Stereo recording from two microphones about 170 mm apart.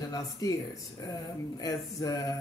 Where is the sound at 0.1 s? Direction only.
20° left (ahead or behind).